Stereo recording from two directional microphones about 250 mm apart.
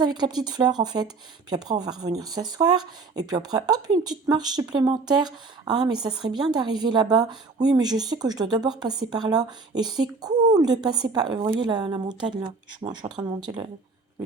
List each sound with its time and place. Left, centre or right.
0.0 s speech: centre